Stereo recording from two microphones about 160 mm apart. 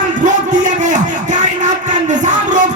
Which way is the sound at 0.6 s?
50° right (ahead or behind).